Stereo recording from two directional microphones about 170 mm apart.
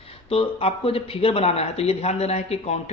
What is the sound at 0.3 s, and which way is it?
Speech, 35° left (ahead or behind).